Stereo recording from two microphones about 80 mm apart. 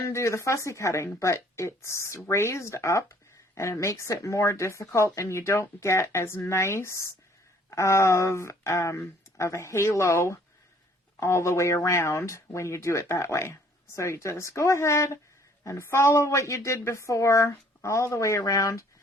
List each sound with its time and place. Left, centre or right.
0.1 s speech: left